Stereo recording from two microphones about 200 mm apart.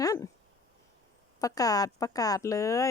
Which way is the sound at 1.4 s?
20° left (ahead or behind).